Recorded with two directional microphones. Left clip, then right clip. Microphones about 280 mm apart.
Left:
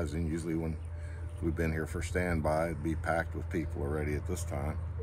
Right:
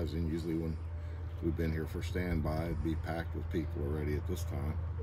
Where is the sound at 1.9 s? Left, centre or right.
Centre.